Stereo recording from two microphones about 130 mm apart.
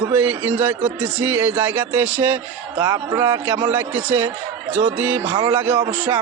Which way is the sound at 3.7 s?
15° right (ahead or behind).